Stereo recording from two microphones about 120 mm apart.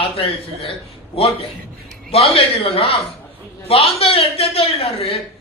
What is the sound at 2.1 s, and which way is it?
A man's voice, 55° left (ahead or behind).